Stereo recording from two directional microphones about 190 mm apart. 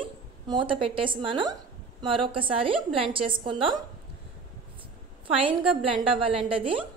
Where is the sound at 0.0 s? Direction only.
25° right (ahead or behind).